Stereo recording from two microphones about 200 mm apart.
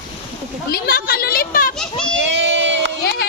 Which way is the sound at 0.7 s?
50° left (ahead or behind).